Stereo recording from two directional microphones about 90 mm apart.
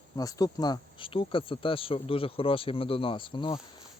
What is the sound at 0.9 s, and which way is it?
Speech, 80° left.